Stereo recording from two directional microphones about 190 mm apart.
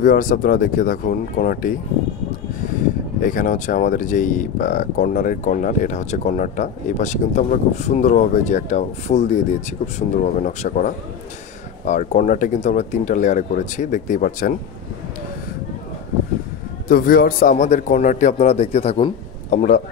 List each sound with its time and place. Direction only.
0.0 s speech: 45° left (ahead or behind)
3.2 s speech: 45° left (ahead or behind)
16.8 s speech: 50° left (ahead or behind)